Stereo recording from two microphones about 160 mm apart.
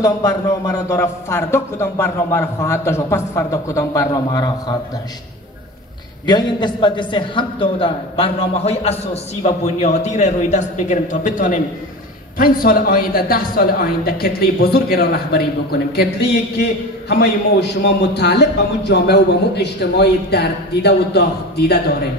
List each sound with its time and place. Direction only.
0.0 s a man's voice: 20° left (ahead or behind)
6.2 s a man's voice: 25° left (ahead or behind); by 21.7 s 90° left